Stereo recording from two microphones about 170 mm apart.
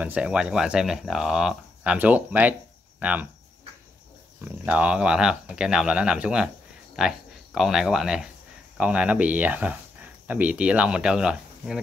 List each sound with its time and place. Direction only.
0.0 s speech: 5° right (ahead or behind)
4.5 s speech: 5° right (ahead or behind)